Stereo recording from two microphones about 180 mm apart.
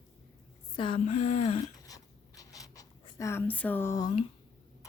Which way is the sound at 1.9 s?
20° left (ahead or behind).